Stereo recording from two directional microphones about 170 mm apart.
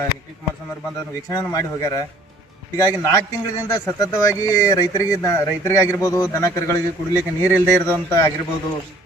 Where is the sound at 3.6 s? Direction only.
20° left (ahead or behind).